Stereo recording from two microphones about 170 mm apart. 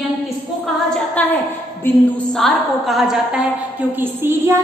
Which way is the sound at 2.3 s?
Centre (ahead or behind).